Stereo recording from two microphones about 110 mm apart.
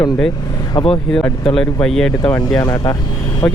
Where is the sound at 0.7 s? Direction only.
55° left (ahead or behind).